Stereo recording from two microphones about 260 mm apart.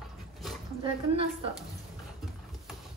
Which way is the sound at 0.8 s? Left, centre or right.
Right.